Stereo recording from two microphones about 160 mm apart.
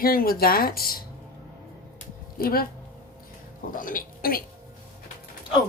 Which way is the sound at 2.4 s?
70° left (ahead or behind).